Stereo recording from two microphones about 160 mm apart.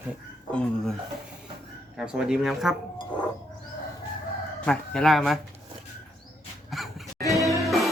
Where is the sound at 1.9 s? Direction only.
5° right (ahead or behind).